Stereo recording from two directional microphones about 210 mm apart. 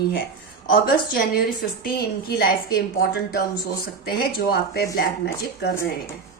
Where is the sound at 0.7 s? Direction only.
45° left (ahead or behind).